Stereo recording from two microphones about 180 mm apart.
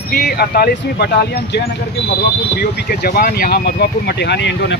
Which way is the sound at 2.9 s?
55° left (ahead or behind).